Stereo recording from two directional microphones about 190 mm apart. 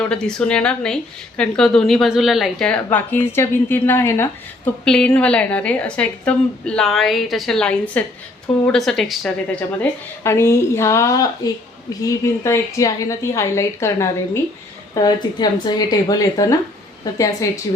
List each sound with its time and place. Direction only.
0.0 s a woman's voice: 5° left (ahead or behind)
10.2 s a woman's voice: 15° left (ahead or behind)